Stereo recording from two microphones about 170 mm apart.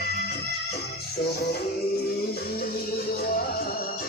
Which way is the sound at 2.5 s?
65° left (ahead or behind).